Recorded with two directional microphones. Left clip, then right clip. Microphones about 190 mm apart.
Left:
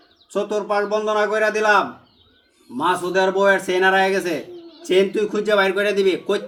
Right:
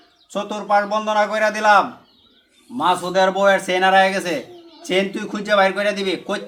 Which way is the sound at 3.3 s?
20° right (ahead or behind).